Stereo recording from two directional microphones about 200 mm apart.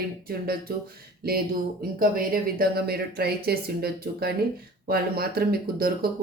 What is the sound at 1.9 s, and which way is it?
Speech, 45° right (ahead or behind).